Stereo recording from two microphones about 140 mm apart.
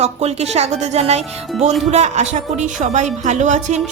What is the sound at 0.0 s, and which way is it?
A woman's voice, 50° right (ahead or behind).